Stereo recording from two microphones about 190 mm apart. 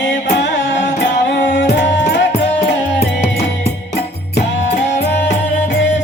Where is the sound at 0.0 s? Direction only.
65° left (ahead or behind).